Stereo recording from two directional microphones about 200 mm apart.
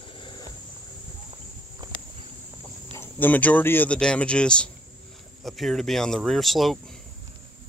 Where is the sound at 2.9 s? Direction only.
10° left (ahead or behind).